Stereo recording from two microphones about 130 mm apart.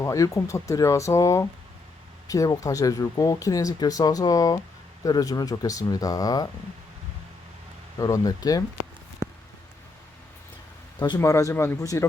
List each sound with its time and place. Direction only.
0.0 s speech: 25° left (ahead or behind)
7.9 s speech: 25° left (ahead or behind)
11.2 s speech: 25° left (ahead or behind)